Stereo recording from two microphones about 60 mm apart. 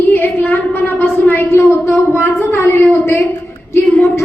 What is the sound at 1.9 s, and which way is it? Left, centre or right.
Child singing, left.